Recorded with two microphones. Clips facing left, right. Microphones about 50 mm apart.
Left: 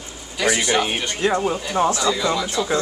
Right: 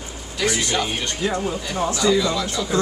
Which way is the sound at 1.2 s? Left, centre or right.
Left.